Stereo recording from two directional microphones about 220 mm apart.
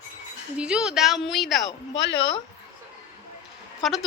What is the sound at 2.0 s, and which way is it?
Speech, 55° left (ahead or behind).